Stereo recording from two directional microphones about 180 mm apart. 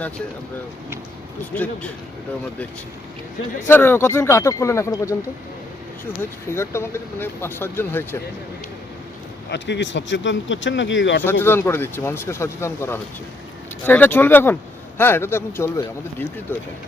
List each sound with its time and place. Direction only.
1.5 s speech: 10° left (ahead or behind)
3.7 s speech: 10° left (ahead or behind)
6.5 s speech: 15° left (ahead or behind)
9.5 s speech: 75° left (ahead or behind); by 11.2 s 90° left
11.2 s speech: 10° left (ahead or behind)